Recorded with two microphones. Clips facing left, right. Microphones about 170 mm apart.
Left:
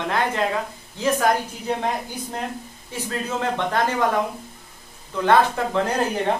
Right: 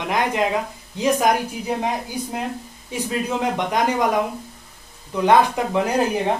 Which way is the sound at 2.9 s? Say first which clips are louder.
Right 3 dB; 15° right (ahead or behind).